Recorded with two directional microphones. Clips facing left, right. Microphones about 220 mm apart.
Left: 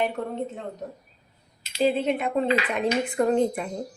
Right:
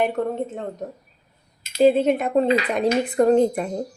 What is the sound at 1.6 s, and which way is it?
A woman's voice, 45° right (ahead or behind).